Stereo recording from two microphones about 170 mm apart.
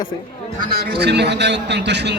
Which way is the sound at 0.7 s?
80° right.